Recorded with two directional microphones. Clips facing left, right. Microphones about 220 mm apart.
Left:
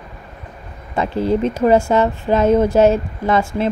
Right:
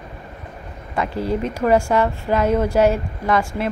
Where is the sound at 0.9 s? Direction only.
25° left (ahead or behind).